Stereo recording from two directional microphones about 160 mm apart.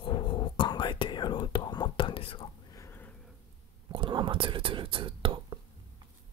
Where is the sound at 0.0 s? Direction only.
30° left (ahead or behind).